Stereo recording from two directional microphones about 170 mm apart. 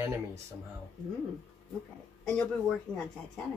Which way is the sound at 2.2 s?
5° left (ahead or behind).